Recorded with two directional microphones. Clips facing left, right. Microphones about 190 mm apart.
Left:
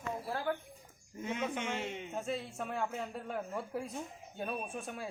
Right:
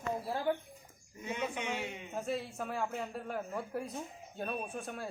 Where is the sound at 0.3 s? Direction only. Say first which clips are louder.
Right 2 dB; 20° right (ahead or behind).